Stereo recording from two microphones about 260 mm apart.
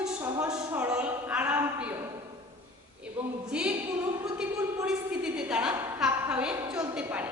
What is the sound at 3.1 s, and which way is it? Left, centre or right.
A woman's voice, centre.